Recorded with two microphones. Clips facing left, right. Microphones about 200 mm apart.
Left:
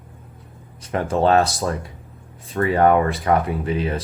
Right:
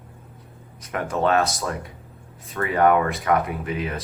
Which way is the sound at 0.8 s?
30° left (ahead or behind).